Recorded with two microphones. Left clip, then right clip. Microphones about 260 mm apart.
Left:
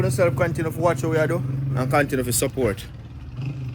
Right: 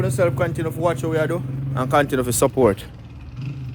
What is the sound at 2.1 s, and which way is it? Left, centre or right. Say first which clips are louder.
Speech: right 5 dB; right.